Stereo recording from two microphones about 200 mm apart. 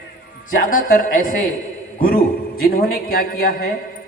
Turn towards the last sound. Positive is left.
turn(degrees=50)  # may be behind; listen again after turning